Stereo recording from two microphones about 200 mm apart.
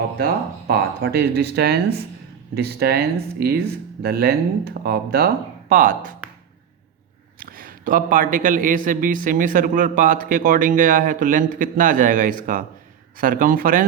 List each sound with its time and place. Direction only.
0.7 s a man's voice: 50° right (ahead or behind)
7.3 s a man's voice: 45° right (ahead or behind)